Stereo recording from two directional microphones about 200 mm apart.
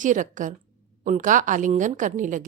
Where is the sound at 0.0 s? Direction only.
40° right (ahead or behind).